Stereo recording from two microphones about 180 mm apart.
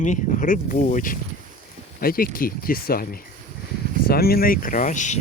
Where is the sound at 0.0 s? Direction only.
45° left (ahead or behind).